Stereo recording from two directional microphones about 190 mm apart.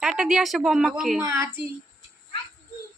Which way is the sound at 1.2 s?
15° right (ahead or behind).